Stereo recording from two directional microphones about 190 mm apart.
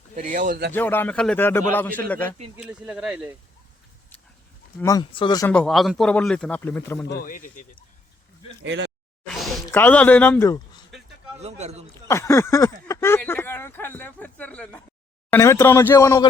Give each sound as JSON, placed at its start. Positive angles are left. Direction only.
{"t": 0.2, "sound": "speech", "side_deg": -40}
{"t": 0.7, "sound": "a man's voice", "side_deg": 10}
{"t": 2.6, "sound": "speech", "side_deg": -5}
{"t": 4.8, "sound": "speech", "side_deg": 20}
{"t": 5.5, "sound": "speech", "side_deg": 5}
{"t": 8.6, "sound": "speech", "side_deg": -70}
{"t": 9.2, "sound": "a sound", "side_deg": 0}
{"t": 9.6, "sound": "speech", "side_deg": 10}
{"t": 11.3, "sound": "speech", "side_deg": -35}
{"t": 12.0, "sound": "a man's voice", "side_deg": 15}